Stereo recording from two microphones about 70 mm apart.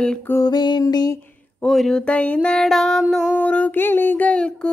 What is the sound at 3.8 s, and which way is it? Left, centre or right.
Speech, left.